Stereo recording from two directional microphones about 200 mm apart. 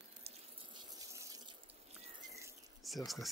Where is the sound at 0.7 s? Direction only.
15° right (ahead or behind).